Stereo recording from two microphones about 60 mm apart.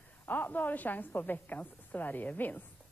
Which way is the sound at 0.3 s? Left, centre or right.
Left.